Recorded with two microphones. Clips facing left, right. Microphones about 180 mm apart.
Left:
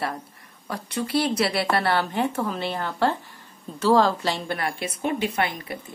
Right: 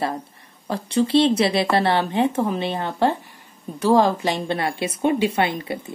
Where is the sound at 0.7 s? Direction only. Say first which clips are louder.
Right 8 dB; 25° right (ahead or behind).